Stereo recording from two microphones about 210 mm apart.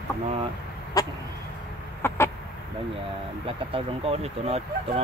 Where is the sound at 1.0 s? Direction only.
15° left (ahead or behind).